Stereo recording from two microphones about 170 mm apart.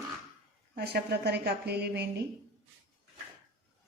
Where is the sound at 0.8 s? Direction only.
70° right (ahead or behind).